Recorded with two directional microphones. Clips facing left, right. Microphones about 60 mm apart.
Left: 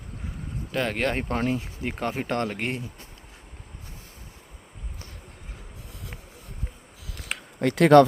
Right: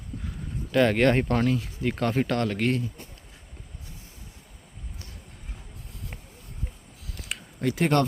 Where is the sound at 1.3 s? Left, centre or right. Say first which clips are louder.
Right 2 dB; left.